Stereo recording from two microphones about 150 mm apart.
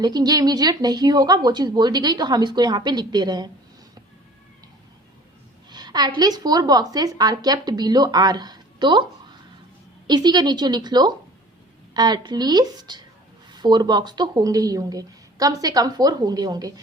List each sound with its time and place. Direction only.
0.0 s speech: 25° right (ahead or behind)
5.7 s speech: 30° right (ahead or behind)
10.1 s speech: 30° right (ahead or behind)